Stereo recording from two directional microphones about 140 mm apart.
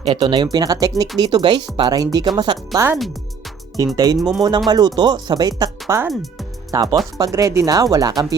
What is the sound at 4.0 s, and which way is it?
Speech, 25° right (ahead or behind).